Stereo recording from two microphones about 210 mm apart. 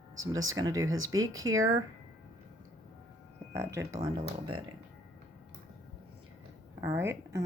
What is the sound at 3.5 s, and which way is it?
Speech, 15° right (ahead or behind).